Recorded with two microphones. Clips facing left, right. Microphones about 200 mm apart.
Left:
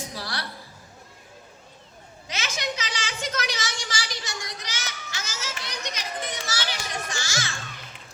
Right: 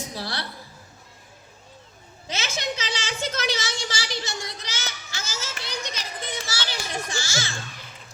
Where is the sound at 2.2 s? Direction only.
30° right (ahead or behind).